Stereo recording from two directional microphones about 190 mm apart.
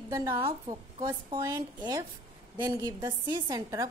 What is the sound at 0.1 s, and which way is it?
Speech, 15° right (ahead or behind).